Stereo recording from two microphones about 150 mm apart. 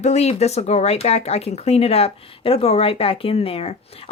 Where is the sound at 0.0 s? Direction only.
45° left (ahead or behind).